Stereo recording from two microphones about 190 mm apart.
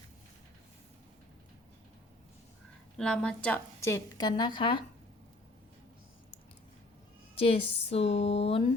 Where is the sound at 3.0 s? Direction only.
5° left (ahead or behind); by 4.8 s 25° left (ahead or behind).